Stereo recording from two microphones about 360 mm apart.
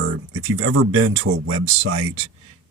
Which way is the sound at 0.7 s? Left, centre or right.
Right.